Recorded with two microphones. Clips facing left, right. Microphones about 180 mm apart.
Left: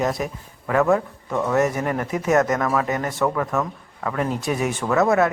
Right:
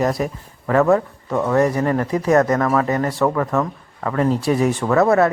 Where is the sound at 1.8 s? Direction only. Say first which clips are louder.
Right 5 dB; 10° left (ahead or behind).